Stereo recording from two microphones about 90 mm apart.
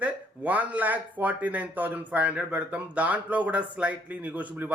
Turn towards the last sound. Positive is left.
turn(degrees=-15)  # may be behind; listen again after turning